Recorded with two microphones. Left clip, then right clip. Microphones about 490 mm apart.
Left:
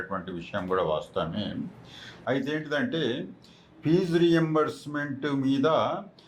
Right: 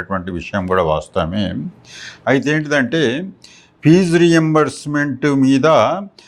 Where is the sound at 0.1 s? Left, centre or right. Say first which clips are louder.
Right 11 dB; right.